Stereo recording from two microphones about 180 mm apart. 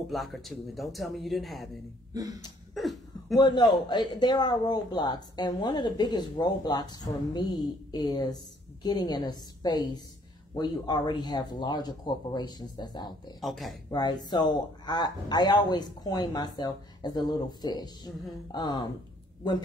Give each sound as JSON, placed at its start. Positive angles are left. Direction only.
{"t": 0.1, "sound": "speech", "side_deg": 0}
{"t": 2.1, "sound": "speech", "side_deg": -20}
{"t": 2.7, "sound": "cough", "side_deg": 0}
{"t": 3.3, "sound": "speech", "side_deg": 25}
{"t": 13.4, "sound": "speech", "side_deg": 0}
{"t": 13.8, "sound": "speech", "side_deg": 20}